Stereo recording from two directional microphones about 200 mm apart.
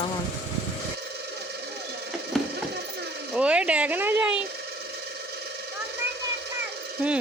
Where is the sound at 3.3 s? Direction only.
5° right (ahead or behind).